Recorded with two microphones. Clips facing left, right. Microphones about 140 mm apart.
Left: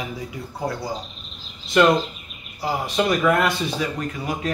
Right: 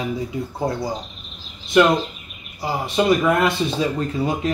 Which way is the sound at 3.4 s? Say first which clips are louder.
Right 3 dB; 30° right (ahead or behind).